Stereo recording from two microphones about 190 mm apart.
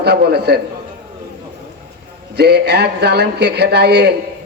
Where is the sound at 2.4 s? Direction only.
60° right (ahead or behind).